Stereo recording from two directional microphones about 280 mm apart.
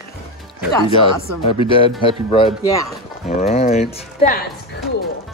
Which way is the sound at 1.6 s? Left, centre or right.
Centre.